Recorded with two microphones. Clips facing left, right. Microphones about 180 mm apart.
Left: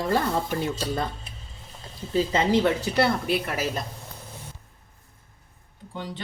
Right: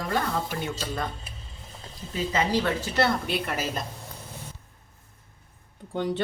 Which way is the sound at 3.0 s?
Centre (ahead or behind).